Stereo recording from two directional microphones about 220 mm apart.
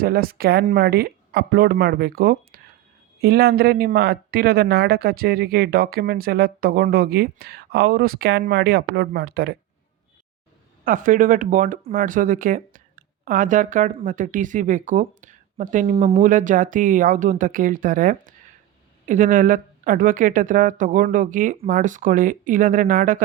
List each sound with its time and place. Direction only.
0.0 s speech: 40° right (ahead or behind)
10.8 s speech: 35° right (ahead or behind)